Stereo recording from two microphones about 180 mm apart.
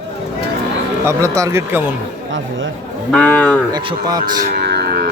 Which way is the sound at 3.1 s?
5° left (ahead or behind).